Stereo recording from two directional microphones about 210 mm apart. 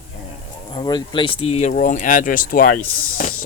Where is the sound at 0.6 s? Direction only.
20° left (ahead or behind).